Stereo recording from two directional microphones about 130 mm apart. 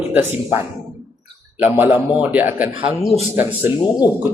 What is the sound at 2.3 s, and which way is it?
Speech, 15° right (ahead or behind).